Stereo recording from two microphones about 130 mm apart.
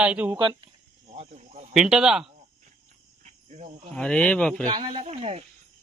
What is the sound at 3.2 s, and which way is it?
Cricket, 60° right (ahead or behind).